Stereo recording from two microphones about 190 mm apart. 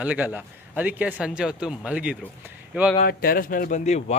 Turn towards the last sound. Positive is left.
turn(degrees=35)  # may be behind; listen again after turning